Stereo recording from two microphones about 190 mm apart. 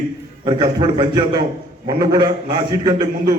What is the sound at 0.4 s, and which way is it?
A man's voice, 20° right (ahead or behind).